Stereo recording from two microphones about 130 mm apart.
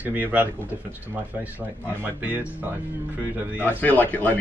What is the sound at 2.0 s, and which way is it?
Speech, 15° right (ahead or behind).